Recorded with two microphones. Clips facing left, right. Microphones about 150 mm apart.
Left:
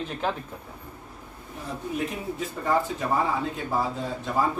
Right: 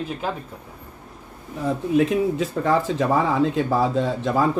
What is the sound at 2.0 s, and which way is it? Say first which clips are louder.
Speech: right 12 dB; 90° right.